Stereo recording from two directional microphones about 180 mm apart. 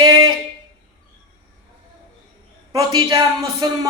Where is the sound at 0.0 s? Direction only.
25° right (ahead or behind).